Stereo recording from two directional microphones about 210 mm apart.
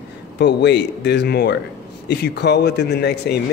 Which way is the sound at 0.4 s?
55° left (ahead or behind).